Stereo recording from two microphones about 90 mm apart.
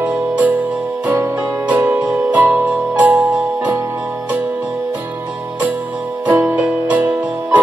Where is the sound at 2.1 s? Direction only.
20° right (ahead or behind).